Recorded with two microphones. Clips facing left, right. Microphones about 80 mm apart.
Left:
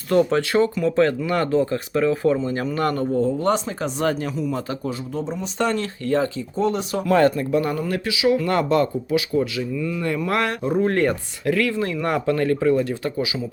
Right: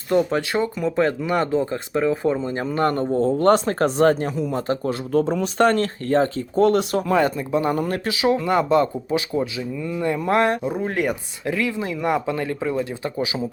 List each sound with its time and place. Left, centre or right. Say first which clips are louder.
0.1 s speech: left 2 dB; centre
2.4 s speech: right 1 dB; right
3.3 s speech: right 5 dB; right
5.1 s speech: right 10 dB; right
7.1 s speech: left 4 dB; centre
7.8 s speech: right 1 dB; right
8.4 s speech: right 1 dB; centre
10.6 s speech: left 4 dB; centre